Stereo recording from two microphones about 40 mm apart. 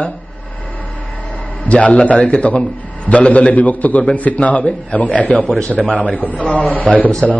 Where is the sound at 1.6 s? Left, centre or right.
Left.